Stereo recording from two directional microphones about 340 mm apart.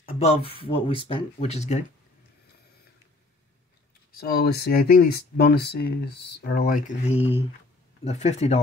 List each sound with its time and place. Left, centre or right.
0.2 s speech: centre
4.2 s speech: left